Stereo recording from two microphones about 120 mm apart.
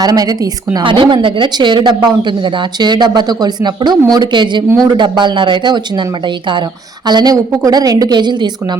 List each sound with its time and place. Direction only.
0.0 s speech: 30° right (ahead or behind)
0.8 s speech: 45° right (ahead or behind)